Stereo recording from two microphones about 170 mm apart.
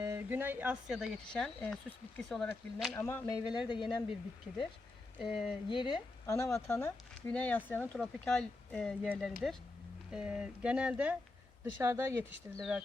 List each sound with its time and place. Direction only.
0.0 s speech: 15° right (ahead or behind); by 2.9 s centre (ahead or behind)
2.9 s speech: 15° left (ahead or behind)
4.5 s speech: 5° right (ahead or behind)
5.6 s speech: 30° left (ahead or behind); by 12.2 s 15° right (ahead or behind)
12.5 s speech: 5° right (ahead or behind)